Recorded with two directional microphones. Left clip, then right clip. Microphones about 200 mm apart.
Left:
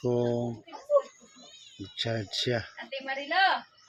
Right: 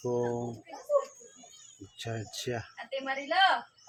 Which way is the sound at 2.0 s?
40° left (ahead or behind).